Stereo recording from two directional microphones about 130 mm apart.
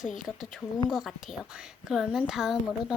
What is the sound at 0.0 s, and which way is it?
Speech, 75° left (ahead or behind).